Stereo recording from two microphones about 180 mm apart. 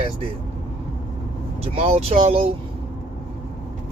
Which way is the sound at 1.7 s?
35° right (ahead or behind).